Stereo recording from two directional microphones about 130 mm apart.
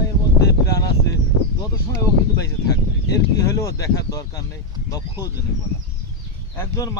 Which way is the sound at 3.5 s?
25° left (ahead or behind).